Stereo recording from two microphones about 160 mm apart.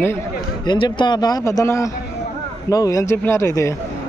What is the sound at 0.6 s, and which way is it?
A man's voice, 30° left (ahead or behind).